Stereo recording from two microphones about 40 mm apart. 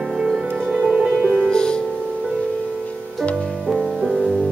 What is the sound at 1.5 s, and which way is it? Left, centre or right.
Music, left.